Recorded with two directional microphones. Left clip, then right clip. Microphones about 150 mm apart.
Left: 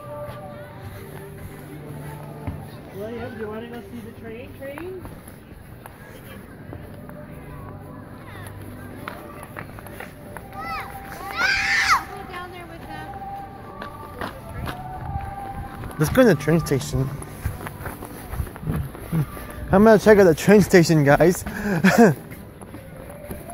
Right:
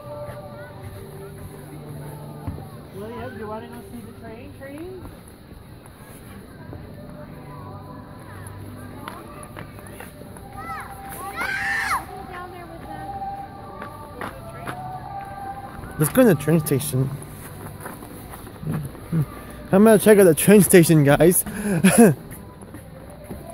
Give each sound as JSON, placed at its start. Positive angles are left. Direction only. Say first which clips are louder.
{"t": 11.5, "sound": "baby cry", "louder": "left 4 dB", "side_deg": -20}
{"t": 13.7, "sound": "music", "louder": "left 2 dB", "side_deg": 65}
{"t": 16.0, "sound": "speech", "louder": "even", "side_deg": -25}
{"t": 19.7, "sound": "speech", "louder": "left 1 dB", "side_deg": -25}